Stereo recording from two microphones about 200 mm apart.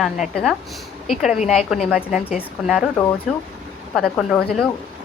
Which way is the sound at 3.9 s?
Centre (ahead or behind).